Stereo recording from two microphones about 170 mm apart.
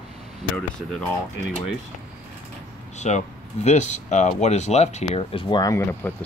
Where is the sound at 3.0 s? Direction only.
45° left (ahead or behind).